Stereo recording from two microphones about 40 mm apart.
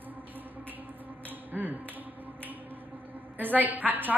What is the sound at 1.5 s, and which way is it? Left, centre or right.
Finger snapping, right.